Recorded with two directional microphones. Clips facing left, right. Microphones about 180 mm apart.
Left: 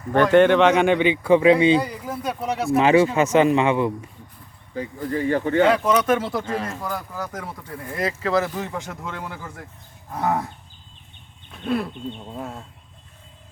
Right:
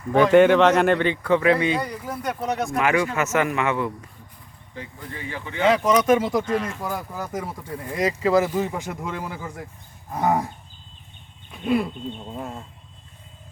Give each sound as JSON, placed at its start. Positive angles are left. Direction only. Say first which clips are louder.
{"t": 0.1, "sound": "speech", "louder": "even", "side_deg": -5}
{"t": 1.8, "sound": "speech", "louder": "left 1 dB", "side_deg": 0}
{"t": 2.7, "sound": "speech", "louder": "left 7 dB", "side_deg": 25}
{"t": 4.9, "sound": "speech", "louder": "left 14 dB", "side_deg": 45}
{"t": 5.7, "sound": "speech", "louder": "right 1 dB", "side_deg": -10}
{"t": 11.5, "sound": "speech", "louder": "right 2 dB", "side_deg": -5}